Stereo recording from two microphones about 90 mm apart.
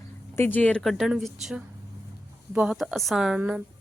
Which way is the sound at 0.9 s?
Centre (ahead or behind).